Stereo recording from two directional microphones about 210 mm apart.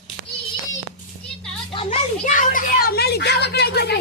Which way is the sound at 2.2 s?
40° left (ahead or behind).